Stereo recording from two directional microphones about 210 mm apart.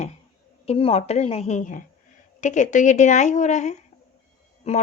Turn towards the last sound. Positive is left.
turn(degrees=30)  # may be behind; listen again after turning